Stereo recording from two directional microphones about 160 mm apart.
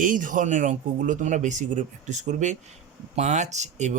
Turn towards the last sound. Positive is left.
turn(degrees=-45)  # may be behind; listen again after turning